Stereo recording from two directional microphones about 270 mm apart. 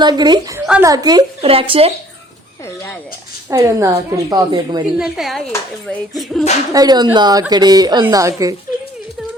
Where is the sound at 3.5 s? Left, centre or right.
Centre.